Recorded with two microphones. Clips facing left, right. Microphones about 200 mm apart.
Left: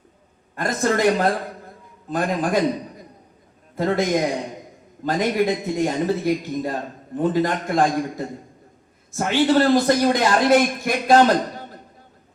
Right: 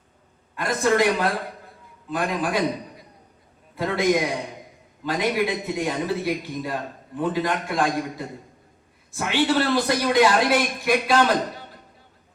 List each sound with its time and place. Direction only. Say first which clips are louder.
0.5 s a man's voice: even; 45° left (ahead or behind)
3.8 s a man's voice: left 5 dB; 45° left (ahead or behind)
5.0 s a man's voice: left 3 dB; 45° left (ahead or behind)